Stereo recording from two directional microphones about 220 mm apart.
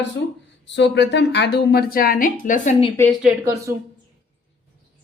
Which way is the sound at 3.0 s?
Centre (ahead or behind).